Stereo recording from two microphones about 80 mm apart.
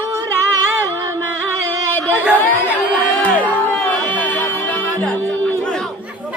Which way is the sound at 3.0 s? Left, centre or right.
Centre.